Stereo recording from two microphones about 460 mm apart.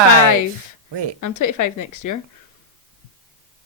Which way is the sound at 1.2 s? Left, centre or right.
Left.